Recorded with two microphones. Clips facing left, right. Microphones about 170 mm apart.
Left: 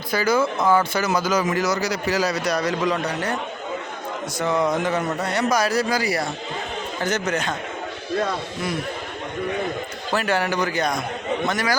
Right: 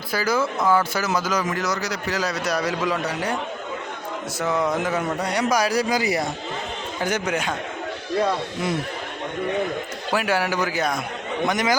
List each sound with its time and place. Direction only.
0.1 s speech: 5° right (ahead or behind)
4.4 s a man's voice: centre (ahead or behind)
10.1 s a man's voice: 10° right (ahead or behind)
11.4 s a man's voice: 20° right (ahead or behind)